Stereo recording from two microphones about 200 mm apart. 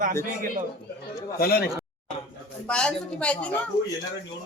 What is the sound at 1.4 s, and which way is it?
Speech, 50° left (ahead or behind).